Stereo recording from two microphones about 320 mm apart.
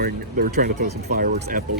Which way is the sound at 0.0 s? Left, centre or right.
Right.